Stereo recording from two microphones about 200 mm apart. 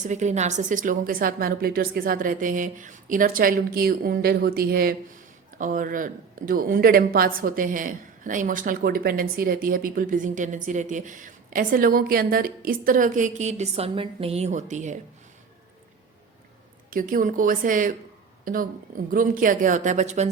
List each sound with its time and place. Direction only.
0.0 s a woman's voice: 35° right (ahead or behind)
16.9 s a woman's voice: 45° right (ahead or behind)